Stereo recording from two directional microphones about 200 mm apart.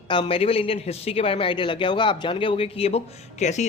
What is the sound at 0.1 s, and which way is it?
Speech, 25° left (ahead or behind).